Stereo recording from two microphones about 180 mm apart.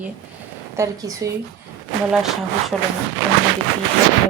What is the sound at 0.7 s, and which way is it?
Speech, 20° right (ahead or behind).